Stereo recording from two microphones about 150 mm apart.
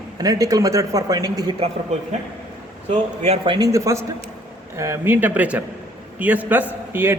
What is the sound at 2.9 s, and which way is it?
Speech, 40° right (ahead or behind).